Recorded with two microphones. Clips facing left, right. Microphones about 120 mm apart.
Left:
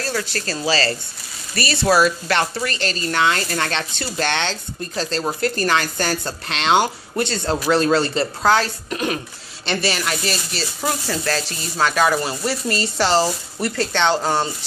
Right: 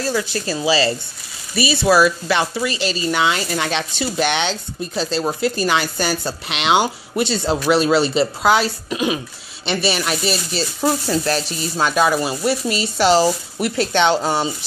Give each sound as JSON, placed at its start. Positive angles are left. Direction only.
{"t": 0.0, "sound": "speech", "side_deg": -15}